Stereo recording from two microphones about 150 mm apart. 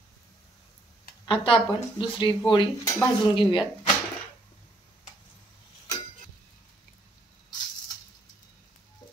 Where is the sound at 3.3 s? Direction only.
30° left (ahead or behind).